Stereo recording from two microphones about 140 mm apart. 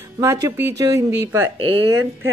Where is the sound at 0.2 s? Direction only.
20° right (ahead or behind).